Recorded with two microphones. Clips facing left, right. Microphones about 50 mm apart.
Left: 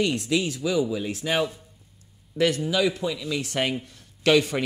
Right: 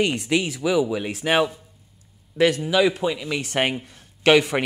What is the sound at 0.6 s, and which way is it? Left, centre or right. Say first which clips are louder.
Speech: right 3 dB; right.